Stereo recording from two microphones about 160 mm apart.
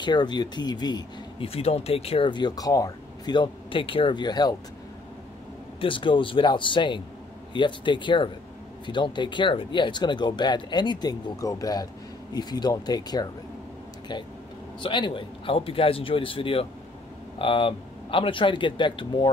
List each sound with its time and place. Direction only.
0.0 s speech: 25° left (ahead or behind)
5.8 s speech: 30° left (ahead or behind)
14.8 s speech: 30° left (ahead or behind)